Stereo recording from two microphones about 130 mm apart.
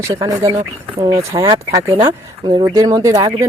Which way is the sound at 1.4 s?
25° right (ahead or behind).